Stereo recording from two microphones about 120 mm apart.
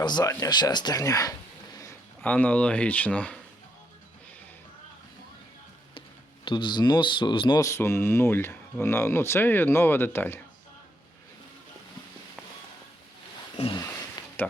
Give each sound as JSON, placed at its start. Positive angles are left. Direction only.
{"t": 0.0, "sound": "speech", "side_deg": 35}
{"t": 2.2, "sound": "speech", "side_deg": 15}
{"t": 6.4, "sound": "speech", "side_deg": 40}
{"t": 7.6, "sound": "speech", "side_deg": 20}
{"t": 14.4, "sound": "a sound", "side_deg": 15}